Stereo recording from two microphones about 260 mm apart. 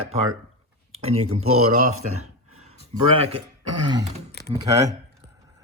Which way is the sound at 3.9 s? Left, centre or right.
Centre.